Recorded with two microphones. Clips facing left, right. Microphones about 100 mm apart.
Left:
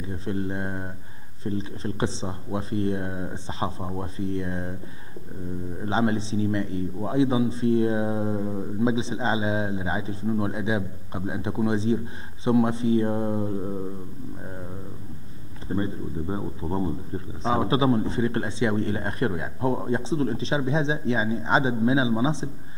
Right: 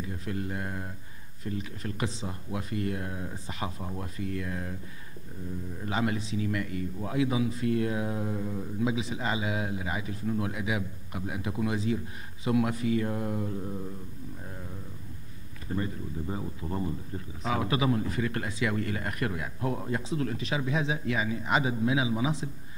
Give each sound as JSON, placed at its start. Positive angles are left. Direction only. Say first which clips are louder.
{"t": 0.0, "sound": "speech", "louder": "left 5 dB", "side_deg": 30}
{"t": 5.8, "sound": "speech", "louder": "left 6 dB", "side_deg": 30}
{"t": 15.7, "sound": "speech", "louder": "left 5 dB", "side_deg": 30}